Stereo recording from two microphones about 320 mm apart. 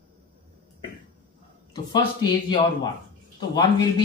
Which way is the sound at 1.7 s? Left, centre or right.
Centre.